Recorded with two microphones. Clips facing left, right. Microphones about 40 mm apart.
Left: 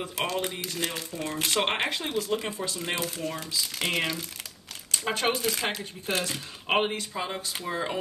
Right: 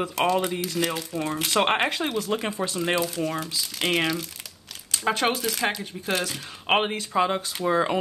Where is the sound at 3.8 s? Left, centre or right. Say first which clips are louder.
Right 5 dB; right.